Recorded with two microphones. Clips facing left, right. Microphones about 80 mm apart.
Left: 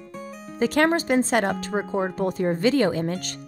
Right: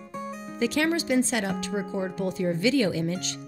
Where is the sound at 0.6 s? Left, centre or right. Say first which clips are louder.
Left 4 dB; left.